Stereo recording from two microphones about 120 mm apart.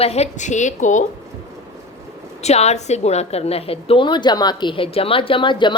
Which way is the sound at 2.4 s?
65° left (ahead or behind).